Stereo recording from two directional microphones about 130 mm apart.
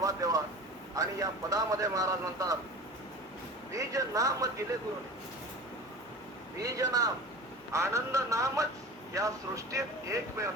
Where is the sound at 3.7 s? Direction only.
25° right (ahead or behind).